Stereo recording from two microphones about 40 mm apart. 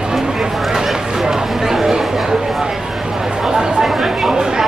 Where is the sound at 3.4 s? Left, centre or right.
Centre.